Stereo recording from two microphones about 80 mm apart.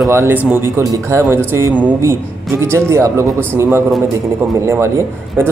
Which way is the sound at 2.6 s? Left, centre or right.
Right.